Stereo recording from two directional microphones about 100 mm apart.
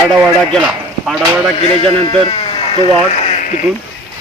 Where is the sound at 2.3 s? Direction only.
60° left (ahead or behind).